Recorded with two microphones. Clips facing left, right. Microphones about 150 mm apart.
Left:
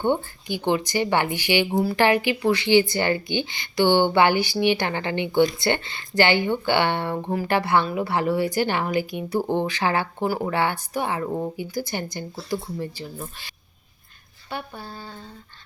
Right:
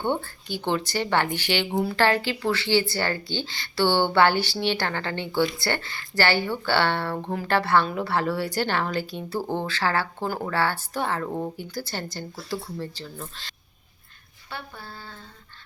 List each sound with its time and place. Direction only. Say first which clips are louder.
0.0 s a woman's voice: left 4 dB; 15° left (ahead or behind)
14.5 s a woman's voice: left 5 dB; 15° left (ahead or behind)